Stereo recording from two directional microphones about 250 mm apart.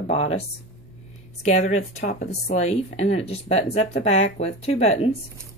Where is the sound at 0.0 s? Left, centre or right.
Left.